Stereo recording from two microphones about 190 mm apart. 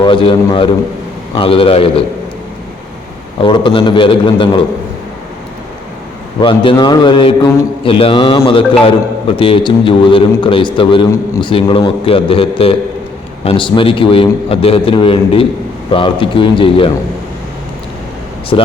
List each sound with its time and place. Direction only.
0.0 s a man's voice: 25° left (ahead or behind)
3.4 s a man's voice: 25° left (ahead or behind)
6.4 s a man's voice: 25° left (ahead or behind)
18.5 s a man's voice: 25° left (ahead or behind)